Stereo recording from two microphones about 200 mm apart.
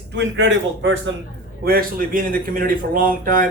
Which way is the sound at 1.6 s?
45° right (ahead or behind).